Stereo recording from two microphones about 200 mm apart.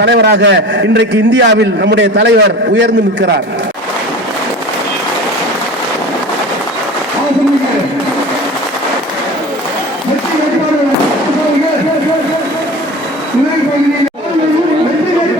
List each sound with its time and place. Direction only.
0.0 s a man's voice: 60° right (ahead or behind)